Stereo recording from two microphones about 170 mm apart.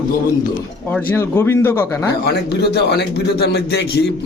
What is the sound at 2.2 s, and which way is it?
Speech, 70° left (ahead or behind).